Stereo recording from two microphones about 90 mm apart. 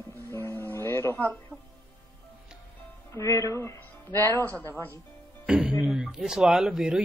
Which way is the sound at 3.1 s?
30° left (ahead or behind).